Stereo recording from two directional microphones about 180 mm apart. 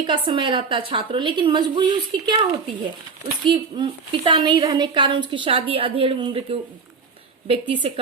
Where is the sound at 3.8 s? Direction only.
25° right (ahead or behind).